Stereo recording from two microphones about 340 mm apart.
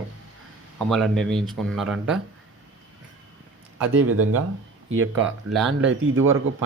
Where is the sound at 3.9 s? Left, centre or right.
Right.